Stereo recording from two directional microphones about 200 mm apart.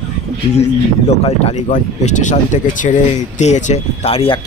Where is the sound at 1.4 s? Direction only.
35° left (ahead or behind).